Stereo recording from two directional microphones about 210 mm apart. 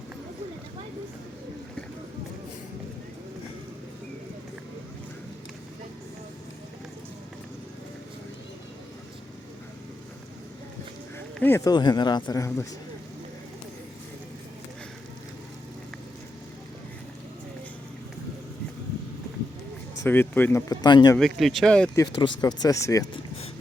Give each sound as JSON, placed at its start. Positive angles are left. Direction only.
{"t": 11.3, "sound": "speech", "side_deg": 10}
{"t": 20.0, "sound": "speech", "side_deg": 10}
{"t": 21.2, "sound": "speech", "side_deg": 0}
{"t": 21.9, "sound": "speech", "side_deg": 20}